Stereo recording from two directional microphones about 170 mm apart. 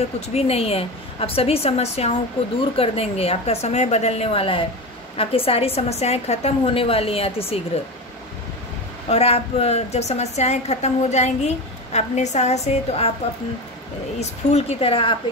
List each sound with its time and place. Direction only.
0.3 s a woman's voice: 35° left (ahead or behind)
9.1 s a woman's voice: 35° left (ahead or behind)
14.5 s a woman's voice: 35° left (ahead or behind)